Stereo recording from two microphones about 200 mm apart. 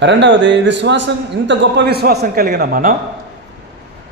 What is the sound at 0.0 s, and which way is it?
A man's voice, 65° right (ahead or behind).